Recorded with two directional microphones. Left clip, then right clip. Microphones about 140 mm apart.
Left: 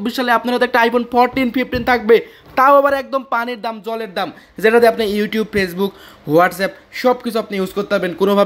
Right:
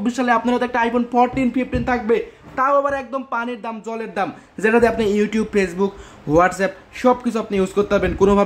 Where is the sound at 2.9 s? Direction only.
25° left (ahead or behind).